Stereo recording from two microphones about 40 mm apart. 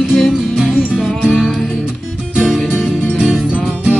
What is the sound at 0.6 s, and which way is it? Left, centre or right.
Music, centre.